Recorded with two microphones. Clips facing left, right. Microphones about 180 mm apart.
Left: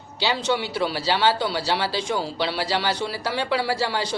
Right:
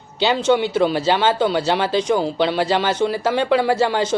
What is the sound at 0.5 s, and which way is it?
Speech, 20° right (ahead or behind).